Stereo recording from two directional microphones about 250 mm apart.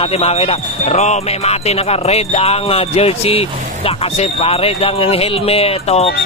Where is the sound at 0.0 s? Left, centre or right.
Left.